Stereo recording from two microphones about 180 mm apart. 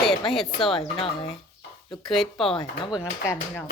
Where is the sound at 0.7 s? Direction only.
30° left (ahead or behind).